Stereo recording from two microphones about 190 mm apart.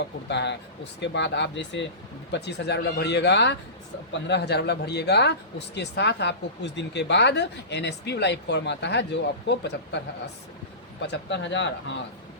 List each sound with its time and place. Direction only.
0.0 s speech: 65° left (ahead or behind)
11.0 s speech: 70° left (ahead or behind)